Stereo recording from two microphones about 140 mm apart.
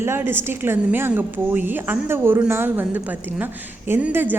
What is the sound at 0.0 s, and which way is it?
A woman's voice, 15° right (ahead or behind).